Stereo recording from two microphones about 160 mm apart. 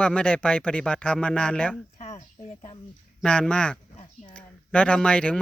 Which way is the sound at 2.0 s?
40° left (ahead or behind).